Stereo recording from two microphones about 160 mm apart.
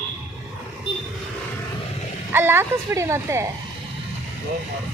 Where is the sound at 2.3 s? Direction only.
15° right (ahead or behind).